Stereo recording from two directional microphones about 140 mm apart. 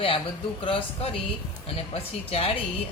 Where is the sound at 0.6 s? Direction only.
40° left (ahead or behind).